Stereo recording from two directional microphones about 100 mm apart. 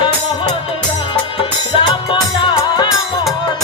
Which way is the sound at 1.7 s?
60° left (ahead or behind).